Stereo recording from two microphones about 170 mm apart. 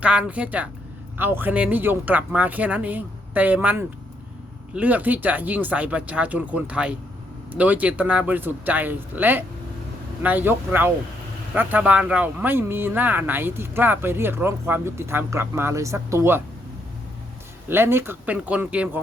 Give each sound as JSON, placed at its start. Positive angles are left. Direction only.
{"t": 0.0, "sound": "a man's voice", "side_deg": -5}
{"t": 17.7, "sound": "a man's voice", "side_deg": -15}